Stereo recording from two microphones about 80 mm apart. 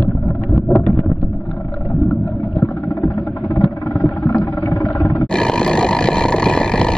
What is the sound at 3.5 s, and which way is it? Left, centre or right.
Vehicle, left.